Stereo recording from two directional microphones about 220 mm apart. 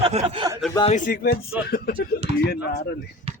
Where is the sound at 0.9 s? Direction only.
40° left (ahead or behind).